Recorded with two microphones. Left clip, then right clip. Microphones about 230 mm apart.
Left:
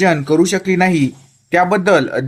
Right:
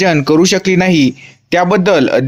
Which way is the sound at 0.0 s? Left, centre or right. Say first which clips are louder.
Right 3 dB; right.